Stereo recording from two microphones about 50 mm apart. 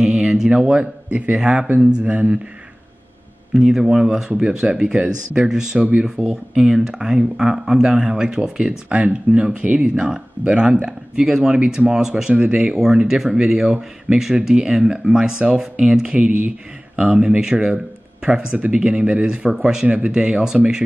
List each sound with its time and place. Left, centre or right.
0.0 s a sound: centre
1.3 s speech: centre
3.5 s speech: centre
5.8 s speech: right
6.2 s speech: centre
16.2 s speech: right
17.0 s speech: centre